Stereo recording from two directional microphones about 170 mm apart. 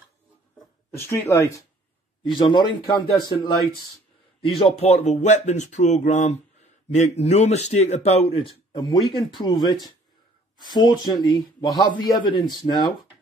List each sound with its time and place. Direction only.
0.9 s speech: 15° left (ahead or behind)